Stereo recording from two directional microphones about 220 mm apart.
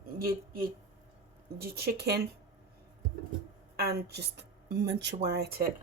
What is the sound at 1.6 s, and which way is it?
Speech, 45° right (ahead or behind).